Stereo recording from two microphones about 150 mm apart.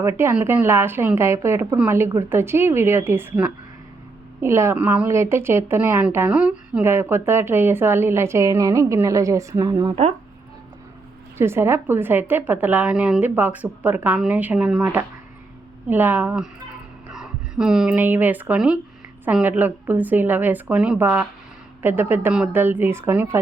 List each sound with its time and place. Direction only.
0.2 s a woman's voice: 15° right (ahead or behind)
11.3 s a woman's voice: 15° right (ahead or behind)